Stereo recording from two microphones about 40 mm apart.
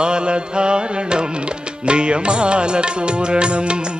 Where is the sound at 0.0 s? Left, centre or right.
Right.